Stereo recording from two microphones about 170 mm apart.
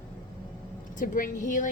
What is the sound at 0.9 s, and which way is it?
Speech, 50° left (ahead or behind).